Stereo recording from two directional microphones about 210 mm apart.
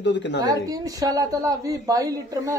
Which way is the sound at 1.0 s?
15° right (ahead or behind).